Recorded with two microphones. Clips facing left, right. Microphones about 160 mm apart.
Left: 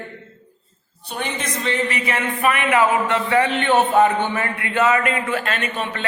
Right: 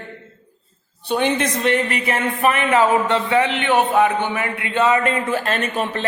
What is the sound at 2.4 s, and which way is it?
Speech, 35° right (ahead or behind).